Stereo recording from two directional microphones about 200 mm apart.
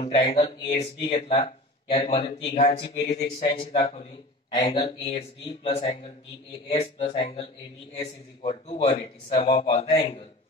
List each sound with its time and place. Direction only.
0.0 s speech: 30° left (ahead or behind)